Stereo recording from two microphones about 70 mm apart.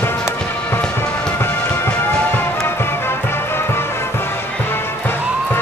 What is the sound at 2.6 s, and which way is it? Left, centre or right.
Music, left.